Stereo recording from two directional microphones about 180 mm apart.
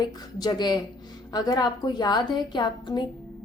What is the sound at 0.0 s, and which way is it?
A woman's voice, 20° left (ahead or behind).